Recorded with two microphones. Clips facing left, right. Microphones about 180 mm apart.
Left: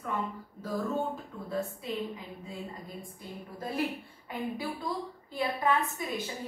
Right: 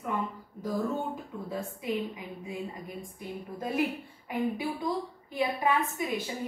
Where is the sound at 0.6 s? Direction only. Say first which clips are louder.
Right 1 dB; 15° right (ahead or behind).